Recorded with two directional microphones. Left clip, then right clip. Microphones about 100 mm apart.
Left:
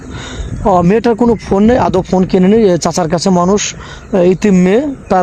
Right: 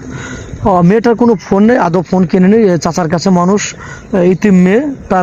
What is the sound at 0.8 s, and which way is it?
A man's voice, 20° left (ahead or behind).